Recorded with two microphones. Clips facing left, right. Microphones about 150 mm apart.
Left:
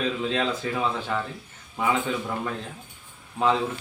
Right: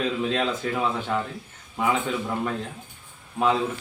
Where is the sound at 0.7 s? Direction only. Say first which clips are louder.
Right 1 dB; 10° right (ahead or behind).